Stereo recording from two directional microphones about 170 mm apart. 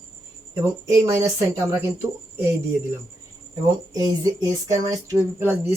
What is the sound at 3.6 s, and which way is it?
Speech, 25° right (ahead or behind).